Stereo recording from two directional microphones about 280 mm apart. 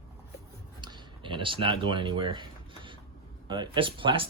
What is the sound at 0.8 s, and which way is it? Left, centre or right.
Speech, centre.